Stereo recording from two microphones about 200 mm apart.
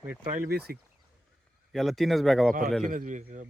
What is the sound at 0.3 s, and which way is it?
Speech, 45° right (ahead or behind).